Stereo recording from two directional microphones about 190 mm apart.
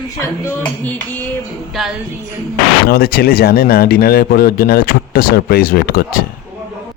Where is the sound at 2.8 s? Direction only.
55° left (ahead or behind).